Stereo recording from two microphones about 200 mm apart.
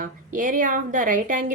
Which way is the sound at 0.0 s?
40° right (ahead or behind).